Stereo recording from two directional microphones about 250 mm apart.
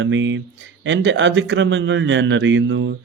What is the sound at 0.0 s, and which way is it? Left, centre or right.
A man's voice, right.